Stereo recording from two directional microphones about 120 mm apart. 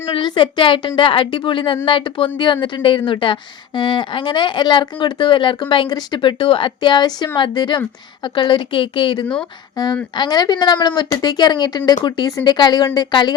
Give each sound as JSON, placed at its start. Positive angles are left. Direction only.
{"t": 0.1, "sound": "a woman's voice", "side_deg": 45}